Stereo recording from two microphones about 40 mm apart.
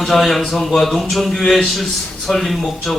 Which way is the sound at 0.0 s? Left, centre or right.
Centre.